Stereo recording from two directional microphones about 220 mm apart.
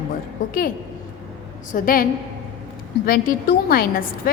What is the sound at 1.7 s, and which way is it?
Speech, 40° left (ahead or behind).